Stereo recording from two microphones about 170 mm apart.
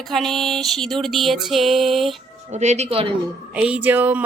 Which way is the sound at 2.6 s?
40° right (ahead or behind).